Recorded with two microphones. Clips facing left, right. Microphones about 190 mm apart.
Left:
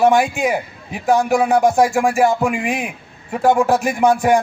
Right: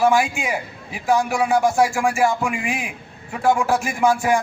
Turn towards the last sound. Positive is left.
turn(degrees=35)  # may be behind; listen again after turning